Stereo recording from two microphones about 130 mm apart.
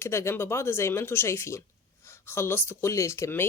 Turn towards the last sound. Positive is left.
turn(degrees=20)  # may be behind; listen again after turning